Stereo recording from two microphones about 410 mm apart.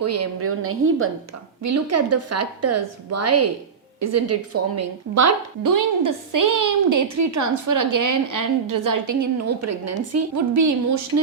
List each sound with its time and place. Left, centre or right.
0.0 s a woman's voice: right